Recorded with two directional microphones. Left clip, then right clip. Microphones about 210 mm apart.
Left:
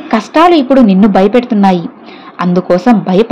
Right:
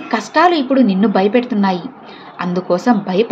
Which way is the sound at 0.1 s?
35° left (ahead or behind).